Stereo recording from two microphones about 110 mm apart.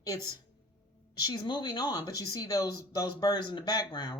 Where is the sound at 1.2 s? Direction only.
40° left (ahead or behind).